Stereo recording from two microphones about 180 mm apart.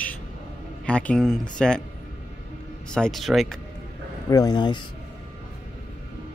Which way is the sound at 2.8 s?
5° left (ahead or behind).